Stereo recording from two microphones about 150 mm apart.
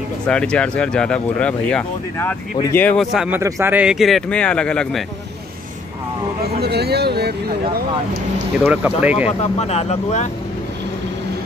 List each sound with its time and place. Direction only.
0.3 s speech: 5° left (ahead or behind)
3.0 s speech: 5° right (ahead or behind)
3.3 s speech: 20° right (ahead or behind); by 5.0 s 5° left (ahead or behind)
6.6 s speech: 90° right
8.6 s speech: 10° right (ahead or behind)
9.4 s speech: 45° left (ahead or behind)